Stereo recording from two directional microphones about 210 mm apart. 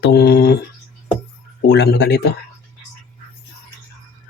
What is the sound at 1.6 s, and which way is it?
Speech, 55° left (ahead or behind).